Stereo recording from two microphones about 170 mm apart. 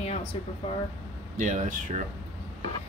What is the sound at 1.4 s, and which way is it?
Speech, 45° right (ahead or behind).